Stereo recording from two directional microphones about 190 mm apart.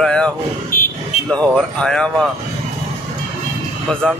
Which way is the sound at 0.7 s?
45° left (ahead or behind).